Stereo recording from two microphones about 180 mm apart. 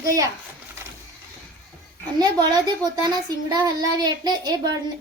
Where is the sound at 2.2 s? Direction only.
20° right (ahead or behind).